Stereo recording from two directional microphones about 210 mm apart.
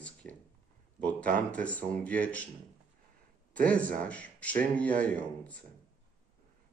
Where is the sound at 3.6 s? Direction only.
5° left (ahead or behind).